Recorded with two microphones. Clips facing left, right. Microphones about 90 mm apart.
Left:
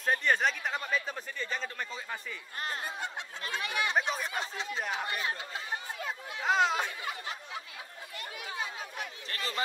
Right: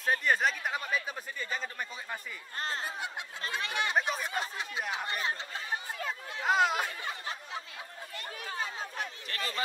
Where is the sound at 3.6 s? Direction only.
30° right (ahead or behind).